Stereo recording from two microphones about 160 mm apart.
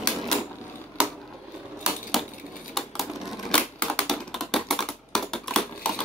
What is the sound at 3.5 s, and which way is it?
Typewriter, 5° left (ahead or behind).